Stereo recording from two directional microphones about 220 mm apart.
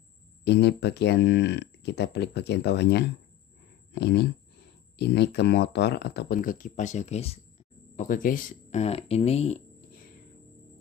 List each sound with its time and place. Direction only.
0.5 s speech: 50° left (ahead or behind); by 9.6 s 30° left (ahead or behind)